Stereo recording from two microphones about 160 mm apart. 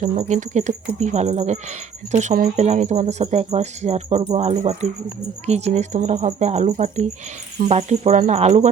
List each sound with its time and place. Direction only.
0.0 s speech: 50° right (ahead or behind)